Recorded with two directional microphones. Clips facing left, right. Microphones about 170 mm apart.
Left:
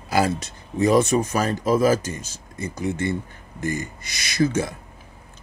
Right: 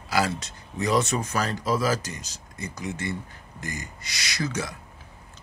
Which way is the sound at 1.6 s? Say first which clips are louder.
Left 8 dB; 50° left (ahead or behind).